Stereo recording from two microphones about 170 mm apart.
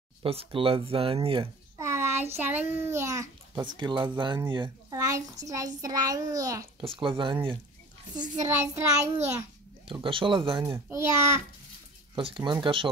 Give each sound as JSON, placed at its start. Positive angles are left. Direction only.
{"t": 0.2, "sound": "speech", "side_deg": -35}
{"t": 1.8, "sound": "child singing", "side_deg": -15}
{"t": 2.3, "sound": "a child's voice", "side_deg": -10}
{"t": 6.8, "sound": "a child's voice", "side_deg": -30}
{"t": 9.8, "sound": "speech", "side_deg": -30}
{"t": 10.9, "sound": "a child's voice", "side_deg": -15}
{"t": 12.2, "sound": "speech", "side_deg": -30}